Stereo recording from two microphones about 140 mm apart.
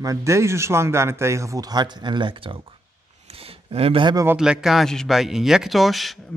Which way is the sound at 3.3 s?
45° right (ahead or behind).